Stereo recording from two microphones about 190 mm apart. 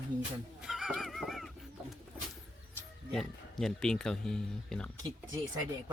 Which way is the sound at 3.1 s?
Centre (ahead or behind).